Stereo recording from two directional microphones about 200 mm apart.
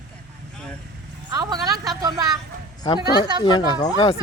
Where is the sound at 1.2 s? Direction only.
20° right (ahead or behind).